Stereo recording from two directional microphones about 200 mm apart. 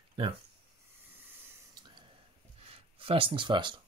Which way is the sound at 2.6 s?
30° right (ahead or behind).